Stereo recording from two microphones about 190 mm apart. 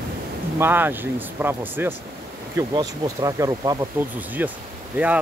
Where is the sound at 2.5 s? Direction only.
20° right (ahead or behind).